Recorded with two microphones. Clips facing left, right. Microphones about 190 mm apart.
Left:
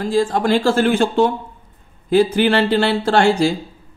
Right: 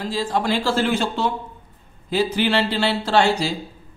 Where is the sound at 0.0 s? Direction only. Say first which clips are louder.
Left 6 dB; 50° left (ahead or behind).